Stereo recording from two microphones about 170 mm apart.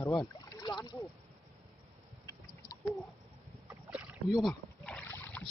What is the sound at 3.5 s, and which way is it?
Rowboat, 5° right (ahead or behind).